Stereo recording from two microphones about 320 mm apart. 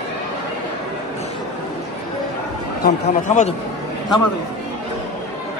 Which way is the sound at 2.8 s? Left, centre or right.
Left.